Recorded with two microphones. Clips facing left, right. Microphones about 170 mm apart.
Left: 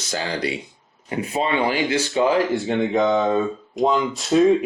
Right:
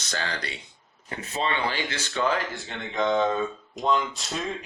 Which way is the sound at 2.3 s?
Centre (ahead or behind).